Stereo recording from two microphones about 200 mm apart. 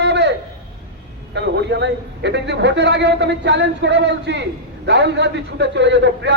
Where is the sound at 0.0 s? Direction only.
60° right (ahead or behind).